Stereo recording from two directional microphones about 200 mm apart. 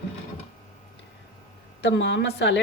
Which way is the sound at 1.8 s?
60° left (ahead or behind).